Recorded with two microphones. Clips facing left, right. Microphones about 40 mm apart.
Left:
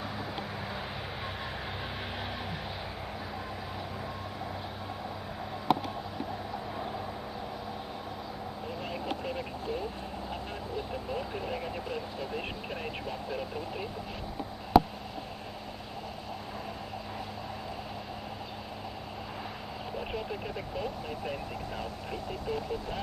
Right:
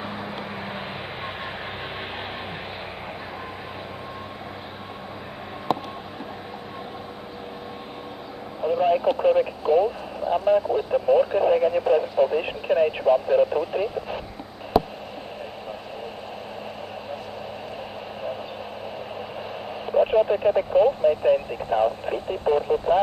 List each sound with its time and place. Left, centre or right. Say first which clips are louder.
0.0 s vehicle: right 5 dB; right
8.6 s speech: right 18 dB; right
14.7 s a sound: right 1 dB; centre
19.9 s radio: right 18 dB; right